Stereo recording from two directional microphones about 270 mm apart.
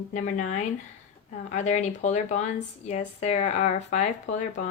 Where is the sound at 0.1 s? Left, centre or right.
Left.